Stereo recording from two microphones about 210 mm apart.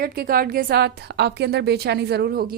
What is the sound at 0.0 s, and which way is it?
Speech, 45° right (ahead or behind).